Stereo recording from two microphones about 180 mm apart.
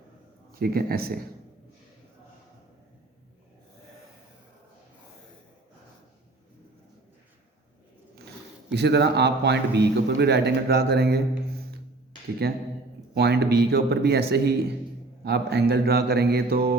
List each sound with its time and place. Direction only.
0.5 s speech: 55° right (ahead or behind)
8.7 s a man's voice: 70° right (ahead or behind)
12.4 s speech: 60° right (ahead or behind)